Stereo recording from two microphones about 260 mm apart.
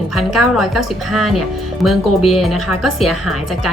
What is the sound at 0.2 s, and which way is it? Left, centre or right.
A woman's voice, centre.